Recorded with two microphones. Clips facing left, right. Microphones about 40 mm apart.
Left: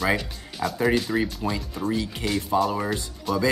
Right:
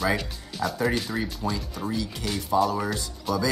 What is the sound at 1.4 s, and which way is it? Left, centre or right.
Speech, left.